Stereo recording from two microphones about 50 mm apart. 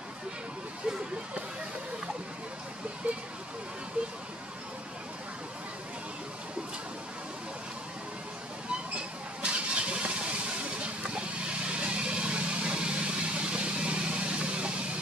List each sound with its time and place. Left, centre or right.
8.9 s vehicle: right